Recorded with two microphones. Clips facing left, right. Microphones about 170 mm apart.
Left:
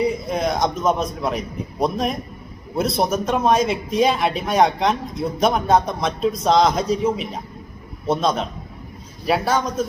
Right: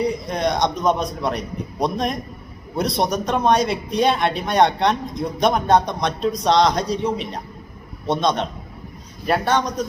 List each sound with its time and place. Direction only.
0.0 s speech: 5° left (ahead or behind)